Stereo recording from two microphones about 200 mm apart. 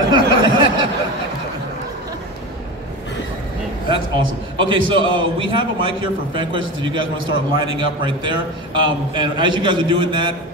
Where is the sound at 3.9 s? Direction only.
25° right (ahead or behind).